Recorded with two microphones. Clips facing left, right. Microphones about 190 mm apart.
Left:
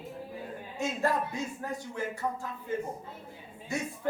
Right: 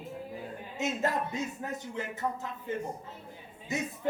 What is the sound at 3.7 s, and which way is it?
Speech, 20° right (ahead or behind).